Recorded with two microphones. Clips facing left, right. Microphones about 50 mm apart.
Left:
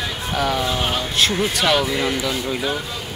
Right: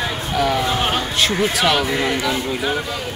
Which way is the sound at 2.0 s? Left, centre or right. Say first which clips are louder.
Right 2 dB; centre.